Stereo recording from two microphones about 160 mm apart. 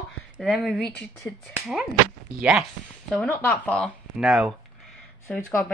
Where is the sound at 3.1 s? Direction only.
10° left (ahead or behind).